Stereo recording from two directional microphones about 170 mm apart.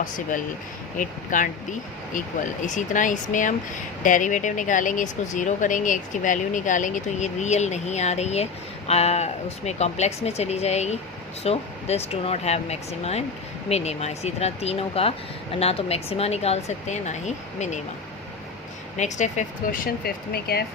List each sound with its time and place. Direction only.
0.0 s speech: 50° left (ahead or behind)
2.6 s speech: 45° left (ahead or behind)
18.9 s speech: 45° left (ahead or behind); by 20.7 s 65° left (ahead or behind)